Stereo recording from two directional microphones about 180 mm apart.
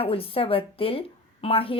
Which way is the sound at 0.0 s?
30° left (ahead or behind).